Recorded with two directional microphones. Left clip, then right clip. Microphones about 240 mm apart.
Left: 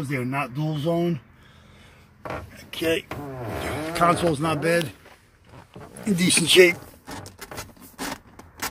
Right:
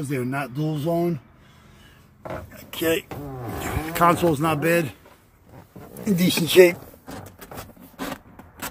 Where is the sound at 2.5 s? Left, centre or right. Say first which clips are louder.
Right 1 dB; centre.